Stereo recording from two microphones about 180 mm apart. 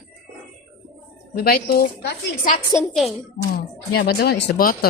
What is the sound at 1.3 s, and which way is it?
Speech, 60° left (ahead or behind).